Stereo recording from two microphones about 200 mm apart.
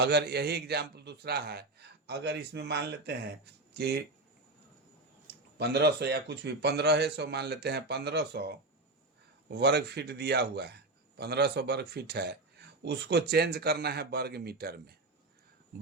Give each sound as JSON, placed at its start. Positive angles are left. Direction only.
{"t": 0.0, "sound": "a man's voice", "side_deg": -55}
{"t": 5.5, "sound": "a man's voice", "side_deg": -55}